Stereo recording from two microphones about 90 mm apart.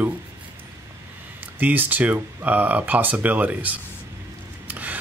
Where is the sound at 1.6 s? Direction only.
20° right (ahead or behind).